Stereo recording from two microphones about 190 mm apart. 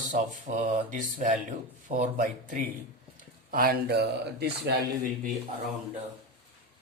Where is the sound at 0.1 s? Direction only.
40° right (ahead or behind); by 4.7 s 60° right (ahead or behind).